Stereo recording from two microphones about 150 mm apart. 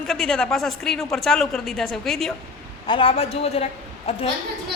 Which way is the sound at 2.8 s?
35° left (ahead or behind).